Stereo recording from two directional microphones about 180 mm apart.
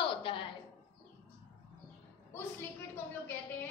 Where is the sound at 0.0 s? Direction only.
30° left (ahead or behind).